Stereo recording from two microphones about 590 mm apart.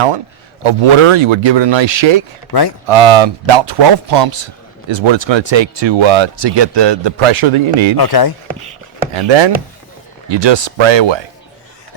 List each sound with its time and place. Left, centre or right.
0.6 s a man's voice: right
2.5 s speech: left
2.8 s a man's voice: right
7.9 s speech: left
9.1 s a man's voice: right